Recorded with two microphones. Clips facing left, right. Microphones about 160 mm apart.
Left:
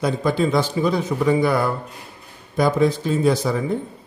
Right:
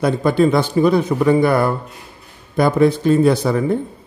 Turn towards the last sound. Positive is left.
turn(degrees=-60)  # may be behind; listen again after turning